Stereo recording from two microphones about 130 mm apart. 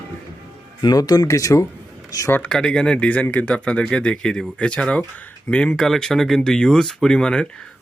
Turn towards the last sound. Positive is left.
turn(degrees=5)  # may be behind; listen again after turning